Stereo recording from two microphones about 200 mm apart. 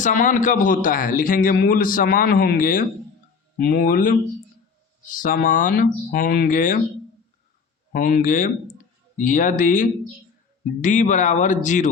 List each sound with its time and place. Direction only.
0.0 s a man's voice: 40° left (ahead or behind)
7.9 s speech: 45° left (ahead or behind)